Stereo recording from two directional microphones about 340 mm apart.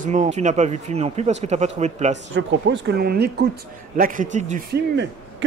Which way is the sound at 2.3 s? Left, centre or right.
Right.